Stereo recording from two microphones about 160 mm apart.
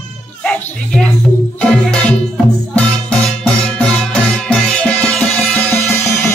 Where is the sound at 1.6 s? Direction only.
5° left (ahead or behind).